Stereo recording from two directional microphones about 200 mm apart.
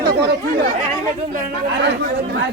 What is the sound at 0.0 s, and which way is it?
Chatter, 55° right (ahead or behind).